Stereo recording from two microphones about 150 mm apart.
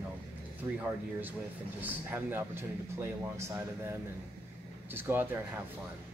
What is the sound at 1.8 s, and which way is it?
Speech, 15° right (ahead or behind).